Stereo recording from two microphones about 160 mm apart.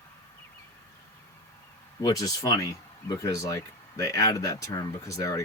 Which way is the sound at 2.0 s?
25° left (ahead or behind).